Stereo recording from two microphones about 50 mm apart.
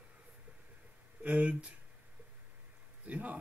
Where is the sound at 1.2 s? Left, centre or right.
Right.